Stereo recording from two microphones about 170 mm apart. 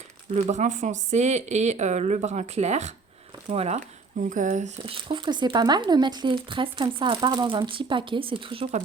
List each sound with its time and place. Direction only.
0.3 s speech: 45° right (ahead or behind)
4.9 s speech: 30° right (ahead or behind)